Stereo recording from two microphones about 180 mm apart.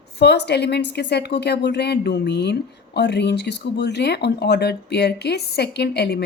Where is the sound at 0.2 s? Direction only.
70° left (ahead or behind).